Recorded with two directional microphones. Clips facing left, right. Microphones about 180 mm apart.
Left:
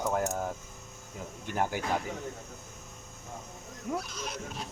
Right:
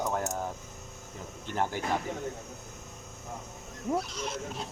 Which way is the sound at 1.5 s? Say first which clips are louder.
Even; 10° left (ahead or behind).